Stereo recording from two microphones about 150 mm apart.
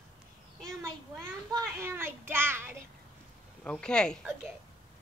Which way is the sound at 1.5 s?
15° right (ahead or behind).